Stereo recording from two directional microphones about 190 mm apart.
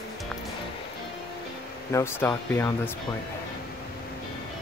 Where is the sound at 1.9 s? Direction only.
15° left (ahead or behind).